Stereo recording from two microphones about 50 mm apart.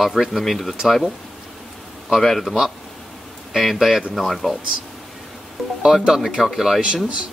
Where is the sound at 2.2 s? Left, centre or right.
Centre.